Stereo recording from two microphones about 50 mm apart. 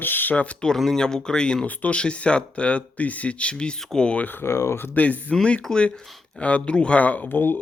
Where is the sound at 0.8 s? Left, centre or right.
Centre.